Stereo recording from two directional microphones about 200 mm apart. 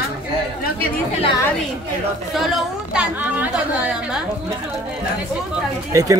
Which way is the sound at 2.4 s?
5° right (ahead or behind).